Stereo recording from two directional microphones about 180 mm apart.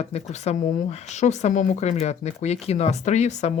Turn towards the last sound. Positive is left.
turn(degrees=40)  # may be behind; listen again after turning